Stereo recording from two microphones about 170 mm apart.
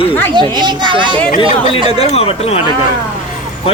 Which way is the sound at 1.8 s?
35° left (ahead or behind).